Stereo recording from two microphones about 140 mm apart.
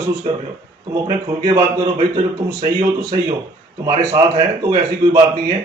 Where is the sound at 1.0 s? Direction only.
25° right (ahead or behind).